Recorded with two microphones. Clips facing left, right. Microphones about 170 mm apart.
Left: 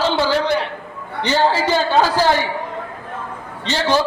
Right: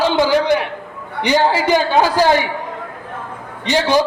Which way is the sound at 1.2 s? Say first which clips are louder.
Right 2 dB; 15° right (ahead or behind).